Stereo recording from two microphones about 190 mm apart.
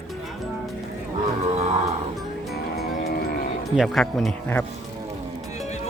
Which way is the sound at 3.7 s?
Centre (ahead or behind).